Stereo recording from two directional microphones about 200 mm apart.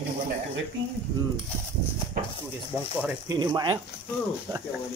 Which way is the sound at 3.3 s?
20° right (ahead or behind).